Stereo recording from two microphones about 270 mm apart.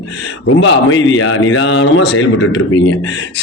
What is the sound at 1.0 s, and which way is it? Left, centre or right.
A man's voice, left.